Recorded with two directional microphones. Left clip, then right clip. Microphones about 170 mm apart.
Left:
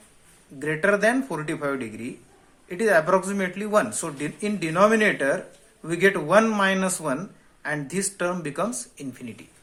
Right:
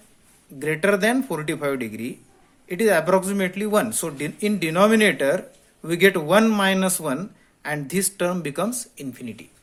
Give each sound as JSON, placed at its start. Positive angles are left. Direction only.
{"t": 0.6, "sound": "speech", "side_deg": -50}